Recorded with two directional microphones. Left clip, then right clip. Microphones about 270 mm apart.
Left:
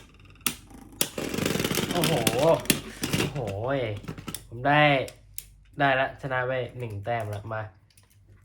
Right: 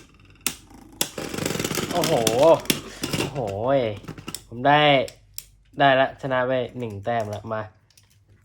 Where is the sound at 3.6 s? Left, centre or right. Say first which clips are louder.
Right 8 dB; right.